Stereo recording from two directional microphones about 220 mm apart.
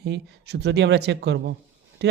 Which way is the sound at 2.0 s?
50° right (ahead or behind).